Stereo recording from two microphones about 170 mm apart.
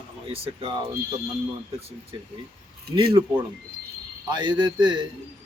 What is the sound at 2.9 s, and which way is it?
Speech, 65° right (ahead or behind).